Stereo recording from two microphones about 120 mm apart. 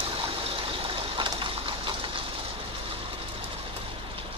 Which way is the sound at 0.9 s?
45° right (ahead or behind).